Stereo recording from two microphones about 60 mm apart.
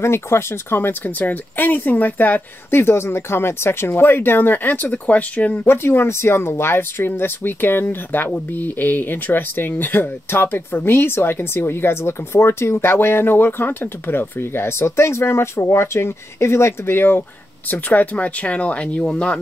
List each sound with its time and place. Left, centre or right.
0.0 s speech: left
5.7 s speech: left
17.6 s speech: left